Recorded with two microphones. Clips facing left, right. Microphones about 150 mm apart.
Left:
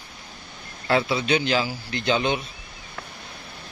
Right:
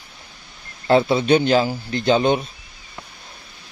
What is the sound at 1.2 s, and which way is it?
A man's voice, 45° right (ahead or behind).